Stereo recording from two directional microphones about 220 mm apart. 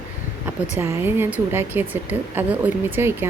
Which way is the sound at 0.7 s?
10° right (ahead or behind).